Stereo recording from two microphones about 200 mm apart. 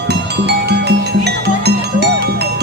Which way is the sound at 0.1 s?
55° right (ahead or behind).